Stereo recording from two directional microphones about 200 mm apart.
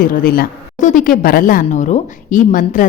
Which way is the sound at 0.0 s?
45° left (ahead or behind).